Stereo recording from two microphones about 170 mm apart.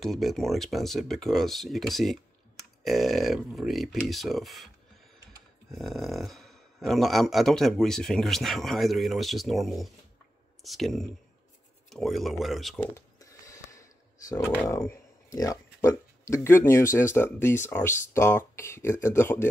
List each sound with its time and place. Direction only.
0.0 s speech: centre (ahead or behind)
5.7 s speech: centre (ahead or behind)
12.8 s a sound: 15° left (ahead or behind)
14.6 s speech: 15° left (ahead or behind)